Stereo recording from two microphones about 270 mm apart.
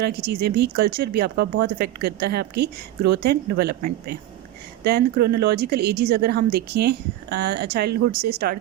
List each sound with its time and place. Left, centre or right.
0.0 s speech: right